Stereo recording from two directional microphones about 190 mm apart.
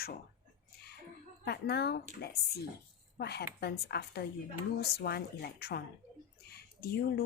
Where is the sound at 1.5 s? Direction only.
60° left (ahead or behind).